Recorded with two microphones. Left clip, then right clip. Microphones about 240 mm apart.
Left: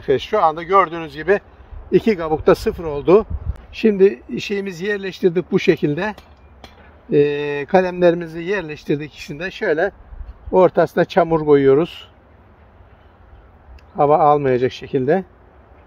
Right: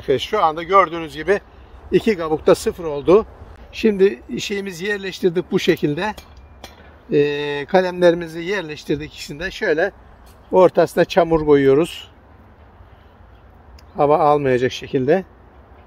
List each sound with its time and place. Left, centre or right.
0.0 s a man's voice: left
13.9 s a man's voice: left